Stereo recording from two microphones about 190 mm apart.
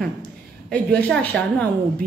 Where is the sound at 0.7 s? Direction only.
5° left (ahead or behind).